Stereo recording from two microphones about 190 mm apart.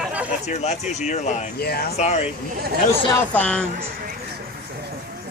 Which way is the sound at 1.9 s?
35° left (ahead or behind).